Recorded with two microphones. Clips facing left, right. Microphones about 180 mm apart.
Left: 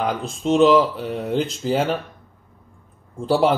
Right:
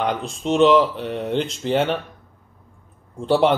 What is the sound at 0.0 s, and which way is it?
Speech, centre (ahead or behind).